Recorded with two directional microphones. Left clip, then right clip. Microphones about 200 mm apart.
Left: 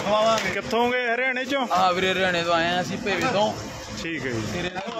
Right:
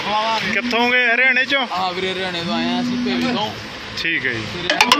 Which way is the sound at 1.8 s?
25° left (ahead or behind).